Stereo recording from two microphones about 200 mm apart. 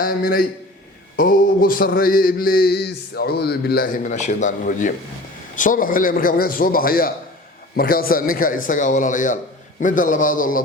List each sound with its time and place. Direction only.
0.0 s mantra: 45° left (ahead or behind)
9.8 s a man's voice: 40° left (ahead or behind)